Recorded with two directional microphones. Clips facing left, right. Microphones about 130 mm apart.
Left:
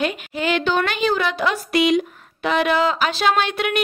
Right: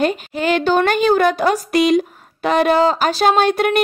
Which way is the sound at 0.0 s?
40° right (ahead or behind).